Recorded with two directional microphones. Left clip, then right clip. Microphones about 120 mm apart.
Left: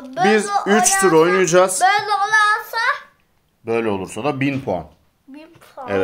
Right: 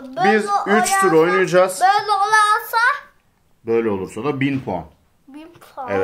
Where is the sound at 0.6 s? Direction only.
60° left (ahead or behind).